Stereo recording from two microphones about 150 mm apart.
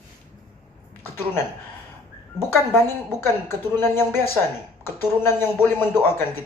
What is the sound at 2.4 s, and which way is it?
A man's voice, 15° left (ahead or behind).